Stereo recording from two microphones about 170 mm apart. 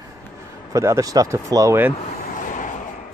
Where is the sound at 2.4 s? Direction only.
50° left (ahead or behind).